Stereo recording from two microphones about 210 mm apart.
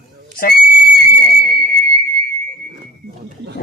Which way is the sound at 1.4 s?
45° left (ahead or behind).